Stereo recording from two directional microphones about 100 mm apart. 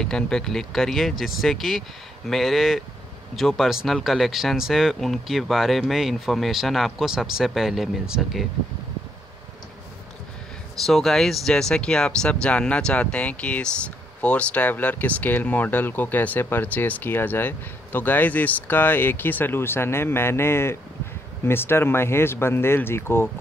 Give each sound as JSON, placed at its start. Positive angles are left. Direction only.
{"t": 0.0, "sound": "speech", "side_deg": 5}
{"t": 10.9, "sound": "speech", "side_deg": 5}